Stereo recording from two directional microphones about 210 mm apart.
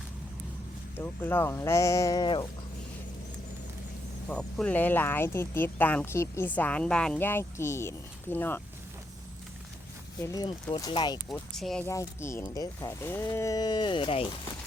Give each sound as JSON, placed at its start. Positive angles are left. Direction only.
{"t": 0.9, "sound": "speech", "side_deg": 10}
{"t": 4.3, "sound": "speech", "side_deg": 5}
{"t": 10.2, "sound": "speech", "side_deg": 15}
{"t": 11.3, "sound": "speech", "side_deg": 0}
{"t": 11.9, "sound": "speech", "side_deg": 15}